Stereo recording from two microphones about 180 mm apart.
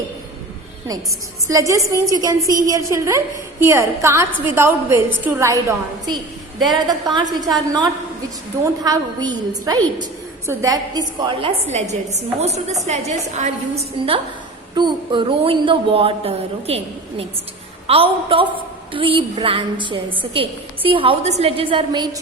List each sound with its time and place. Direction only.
1.5 s a woman's voice: 20° right (ahead or behind)